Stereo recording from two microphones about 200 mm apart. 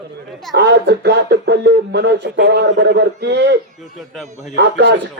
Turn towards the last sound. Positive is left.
turn(degrees=-60)  # may be behind; listen again after turning